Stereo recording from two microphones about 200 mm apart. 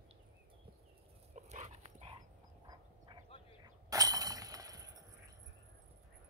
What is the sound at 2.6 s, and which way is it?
Duck, 20° right (ahead or behind).